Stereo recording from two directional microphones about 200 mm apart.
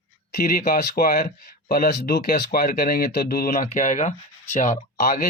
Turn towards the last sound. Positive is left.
turn(degrees=45)  # may be behind; listen again after turning